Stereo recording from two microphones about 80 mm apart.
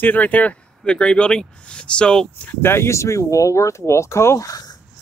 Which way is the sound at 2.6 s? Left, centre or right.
Left.